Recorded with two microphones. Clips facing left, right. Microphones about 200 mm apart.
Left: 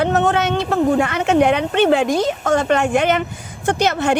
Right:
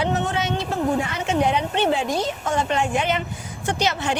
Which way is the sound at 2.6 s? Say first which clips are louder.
Left 6 dB; 70° left (ahead or behind).